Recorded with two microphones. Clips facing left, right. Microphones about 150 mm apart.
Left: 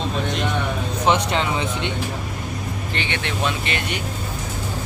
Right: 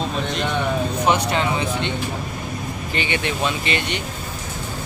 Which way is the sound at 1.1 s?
25° left (ahead or behind).